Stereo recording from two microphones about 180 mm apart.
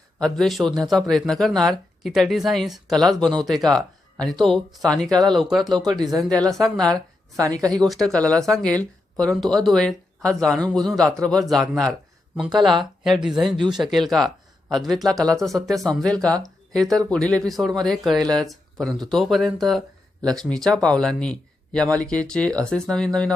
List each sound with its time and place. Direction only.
0.2 s speech: 5° left (ahead or behind)
5.7 s speech: 25° right (ahead or behind)
6.2 s speech: 5° left (ahead or behind)